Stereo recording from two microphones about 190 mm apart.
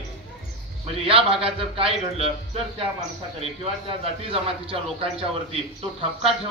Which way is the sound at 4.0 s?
30° right (ahead or behind).